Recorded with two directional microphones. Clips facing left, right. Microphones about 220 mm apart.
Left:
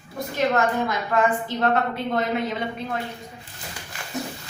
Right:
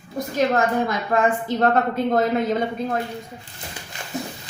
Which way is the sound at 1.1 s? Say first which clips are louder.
Right 2 dB; 40° right (ahead or behind).